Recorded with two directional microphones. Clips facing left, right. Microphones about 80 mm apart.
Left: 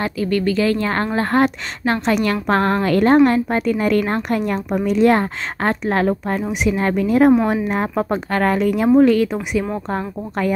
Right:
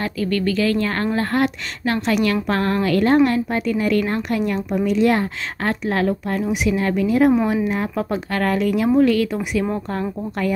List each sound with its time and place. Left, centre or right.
0.0 s speech: left
7.9 s speech: left